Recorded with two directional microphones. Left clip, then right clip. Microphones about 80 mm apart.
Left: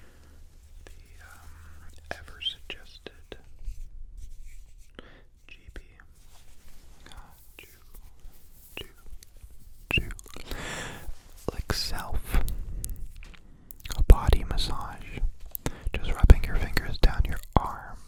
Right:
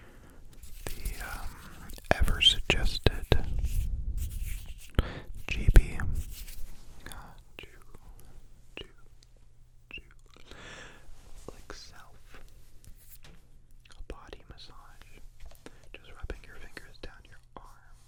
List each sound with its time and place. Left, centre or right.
0.9 s whispering: right
4.9 s whispering: right
5.5 s whispering: right
7.0 s whispering: centre
8.8 s whispering: centre
9.9 s whispering: left